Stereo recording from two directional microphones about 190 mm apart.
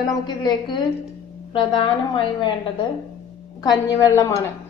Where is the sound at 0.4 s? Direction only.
20° left (ahead or behind).